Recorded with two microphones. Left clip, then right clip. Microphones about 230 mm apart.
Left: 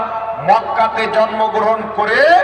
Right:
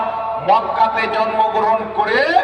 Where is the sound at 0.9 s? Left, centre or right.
Right.